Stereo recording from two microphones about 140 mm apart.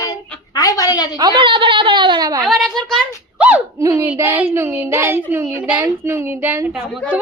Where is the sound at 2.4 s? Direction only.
Centre (ahead or behind).